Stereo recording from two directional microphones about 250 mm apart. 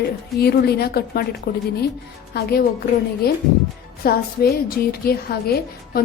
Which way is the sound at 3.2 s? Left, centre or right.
Left.